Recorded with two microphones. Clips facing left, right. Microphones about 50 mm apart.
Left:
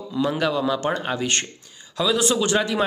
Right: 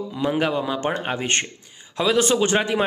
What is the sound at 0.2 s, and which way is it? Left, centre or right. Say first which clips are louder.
Speech: even; right.